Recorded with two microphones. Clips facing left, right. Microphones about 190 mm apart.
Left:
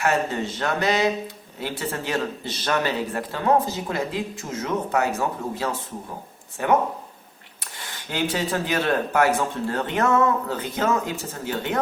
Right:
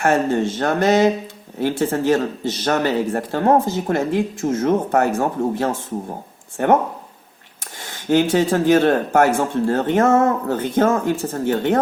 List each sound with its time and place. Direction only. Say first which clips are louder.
0.0 s speech: right 6 dB; 50° right (ahead or behind)
7.8 s speech: right 10 dB; 50° right (ahead or behind)